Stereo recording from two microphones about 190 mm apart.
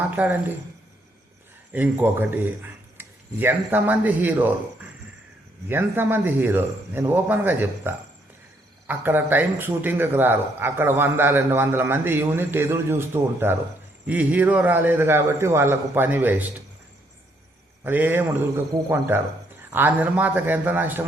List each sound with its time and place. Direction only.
0.2 s speech: 10° right (ahead or behind)
1.7 s speech: 10° right (ahead or behind)
5.6 s speech: 10° right (ahead or behind)
17.8 s speech: 10° right (ahead or behind)